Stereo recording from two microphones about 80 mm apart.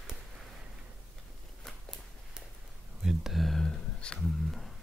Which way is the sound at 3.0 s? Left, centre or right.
Centre.